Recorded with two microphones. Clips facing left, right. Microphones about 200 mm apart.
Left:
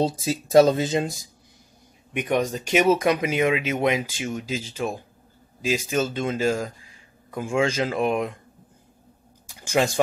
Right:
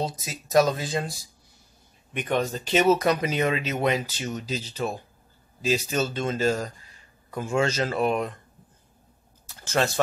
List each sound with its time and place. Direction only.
0.0 s speech: 30° left (ahead or behind)
2.1 s speech: 15° left (ahead or behind)
9.5 s a sound: 10° left (ahead or behind)